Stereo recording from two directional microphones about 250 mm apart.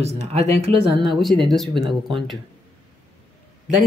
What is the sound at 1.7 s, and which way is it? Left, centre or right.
Speech, centre.